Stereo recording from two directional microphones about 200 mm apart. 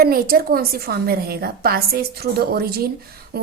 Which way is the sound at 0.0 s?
50° right (ahead or behind).